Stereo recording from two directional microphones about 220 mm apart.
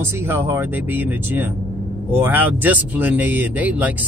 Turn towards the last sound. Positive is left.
turn(degrees=-5)  # may be behind; listen again after turning